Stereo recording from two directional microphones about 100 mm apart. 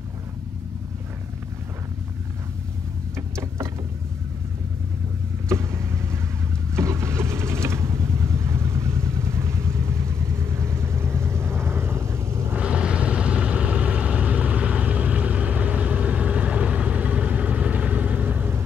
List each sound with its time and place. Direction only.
3.2 s vehicle: 30° right (ahead or behind)
5.5 s vehicle: 30° right (ahead or behind)
12.5 s vehicle: 10° right (ahead or behind)